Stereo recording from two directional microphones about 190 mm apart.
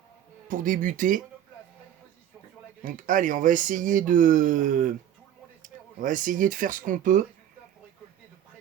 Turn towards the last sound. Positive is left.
turn(degrees=-45)  # may be behind; listen again after turning